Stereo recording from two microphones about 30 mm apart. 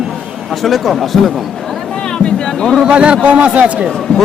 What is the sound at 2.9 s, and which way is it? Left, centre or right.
Speech, right.